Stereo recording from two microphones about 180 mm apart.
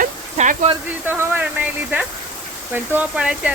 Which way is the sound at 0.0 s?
40° right (ahead or behind).